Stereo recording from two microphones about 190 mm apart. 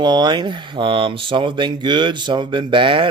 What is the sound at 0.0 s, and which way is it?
Speech, 25° right (ahead or behind).